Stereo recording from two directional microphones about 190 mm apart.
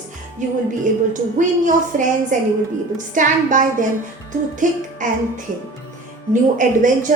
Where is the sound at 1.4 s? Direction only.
40° right (ahead or behind).